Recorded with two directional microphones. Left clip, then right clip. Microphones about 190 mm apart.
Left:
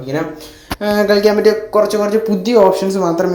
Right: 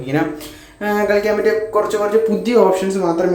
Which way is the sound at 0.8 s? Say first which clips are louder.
Left 4 dB; 20° left (ahead or behind).